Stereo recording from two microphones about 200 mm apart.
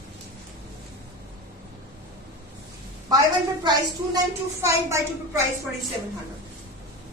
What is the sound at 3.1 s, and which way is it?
A woman's voice, 20° right (ahead or behind).